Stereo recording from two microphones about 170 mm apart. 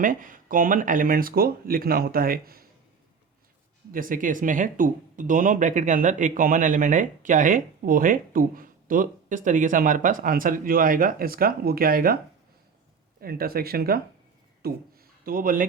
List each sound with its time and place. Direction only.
0.0 s speech: 50° right (ahead or behind)
3.9 s speech: 55° right (ahead or behind)
14.6 s a sound: 60° right (ahead or behind)